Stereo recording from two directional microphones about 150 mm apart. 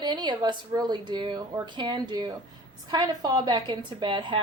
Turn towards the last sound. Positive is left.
turn(degrees=-30)  # may be behind; listen again after turning